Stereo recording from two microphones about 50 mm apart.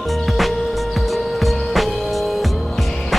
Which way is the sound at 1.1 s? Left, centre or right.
Centre.